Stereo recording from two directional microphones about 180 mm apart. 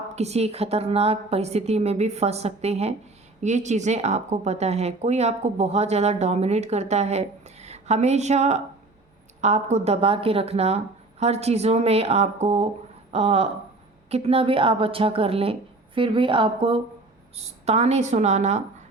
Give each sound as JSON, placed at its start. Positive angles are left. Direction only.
{"t": 0.2, "sound": "speech", "side_deg": -35}